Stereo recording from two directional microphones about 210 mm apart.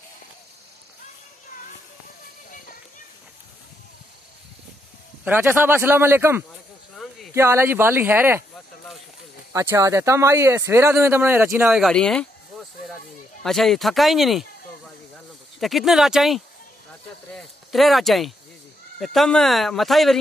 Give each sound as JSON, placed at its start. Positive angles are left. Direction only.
{"t": 5.2, "sound": "speech", "side_deg": -10}
{"t": 7.0, "sound": "a sound", "side_deg": 0}
{"t": 7.3, "sound": "speech", "side_deg": -10}
{"t": 8.5, "sound": "a sound", "side_deg": 0}
{"t": 9.5, "sound": "speech", "side_deg": -15}
{"t": 13.4, "sound": "speech", "side_deg": 0}
{"t": 15.6, "sound": "speech", "side_deg": 0}